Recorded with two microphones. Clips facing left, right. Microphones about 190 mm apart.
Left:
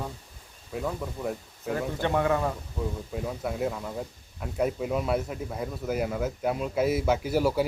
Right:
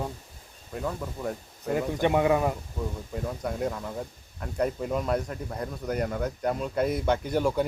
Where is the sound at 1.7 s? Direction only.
15° right (ahead or behind).